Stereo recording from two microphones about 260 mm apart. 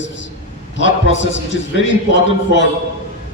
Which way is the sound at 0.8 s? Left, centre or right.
Left.